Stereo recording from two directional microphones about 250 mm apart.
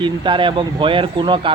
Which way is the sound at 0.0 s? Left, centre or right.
Centre.